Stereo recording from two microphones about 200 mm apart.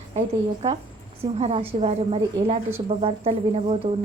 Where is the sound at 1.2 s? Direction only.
30° right (ahead or behind).